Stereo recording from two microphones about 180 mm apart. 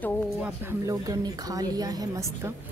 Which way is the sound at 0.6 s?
20° right (ahead or behind).